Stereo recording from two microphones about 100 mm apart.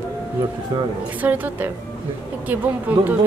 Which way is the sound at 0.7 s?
45° right (ahead or behind).